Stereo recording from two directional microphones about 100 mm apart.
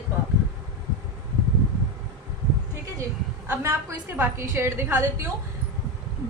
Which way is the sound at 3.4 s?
20° right (ahead or behind).